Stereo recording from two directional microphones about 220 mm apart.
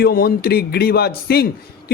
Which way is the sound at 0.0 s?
45° left (ahead or behind).